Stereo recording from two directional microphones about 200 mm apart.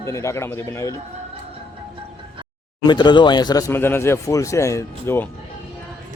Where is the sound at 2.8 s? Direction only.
20° left (ahead or behind).